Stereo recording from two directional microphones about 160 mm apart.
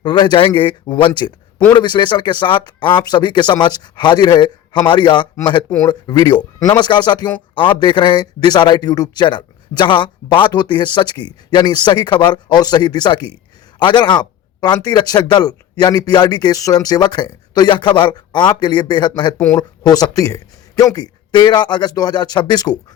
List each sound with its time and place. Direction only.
0.0 s a man's voice: 30° left (ahead or behind)